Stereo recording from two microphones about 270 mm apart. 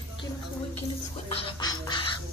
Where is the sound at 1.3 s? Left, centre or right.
Centre.